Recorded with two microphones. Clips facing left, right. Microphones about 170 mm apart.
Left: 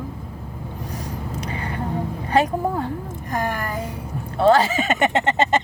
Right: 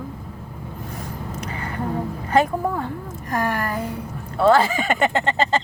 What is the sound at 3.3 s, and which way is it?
Speech, 20° left (ahead or behind).